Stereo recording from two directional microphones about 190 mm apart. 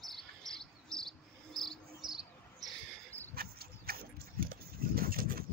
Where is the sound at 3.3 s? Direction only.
55° right (ahead or behind).